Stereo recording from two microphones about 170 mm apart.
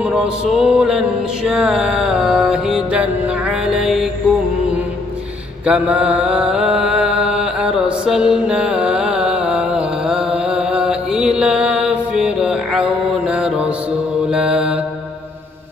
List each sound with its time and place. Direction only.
0.0 s mantra: 5° right (ahead or behind)
5.7 s mantra: 5° right (ahead or behind)